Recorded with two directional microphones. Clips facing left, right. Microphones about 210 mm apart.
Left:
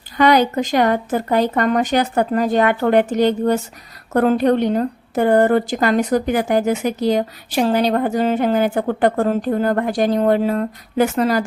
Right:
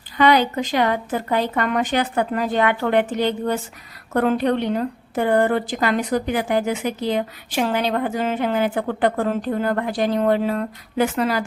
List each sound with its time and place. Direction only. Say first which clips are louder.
0.2 s a woman's voice: left 3 dB; 45° left (ahead or behind)